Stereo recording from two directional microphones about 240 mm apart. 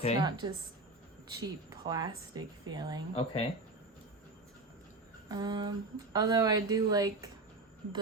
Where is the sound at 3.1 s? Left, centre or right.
Left.